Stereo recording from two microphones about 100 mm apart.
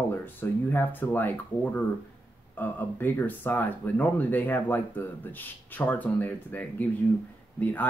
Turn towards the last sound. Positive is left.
turn(degrees=15)  # may be behind; listen again after turning